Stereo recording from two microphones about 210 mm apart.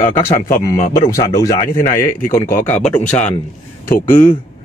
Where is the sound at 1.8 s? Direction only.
40° left (ahead or behind).